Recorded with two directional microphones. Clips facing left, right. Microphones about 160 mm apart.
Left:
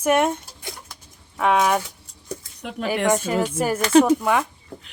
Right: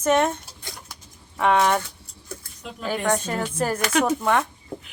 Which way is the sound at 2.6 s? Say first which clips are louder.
Left 7 dB; 70° left (ahead or behind).